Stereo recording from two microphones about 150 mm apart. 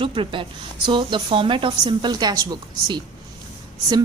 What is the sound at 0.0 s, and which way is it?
A woman's voice, 35° right (ahead or behind).